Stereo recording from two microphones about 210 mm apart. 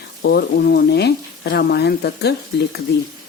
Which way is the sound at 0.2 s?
50° left (ahead or behind).